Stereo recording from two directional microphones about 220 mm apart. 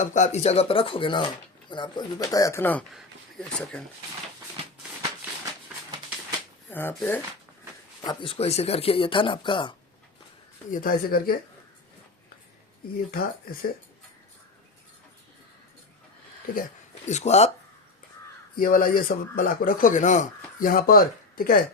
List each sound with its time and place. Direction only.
0.0 s speech: 30° left (ahead or behind); by 3.8 s 5° left (ahead or behind)
6.7 s speech: 10° left (ahead or behind)
8.0 s speech: 25° left (ahead or behind)
10.7 s speech: 40° left (ahead or behind)
13.1 s speech: 45° left (ahead or behind)
17.1 s speech: 30° left (ahead or behind)
18.5 s speech: 40° left (ahead or behind)